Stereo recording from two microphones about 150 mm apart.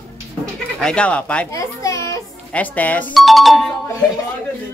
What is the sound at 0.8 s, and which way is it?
Speech, 5° left (ahead or behind).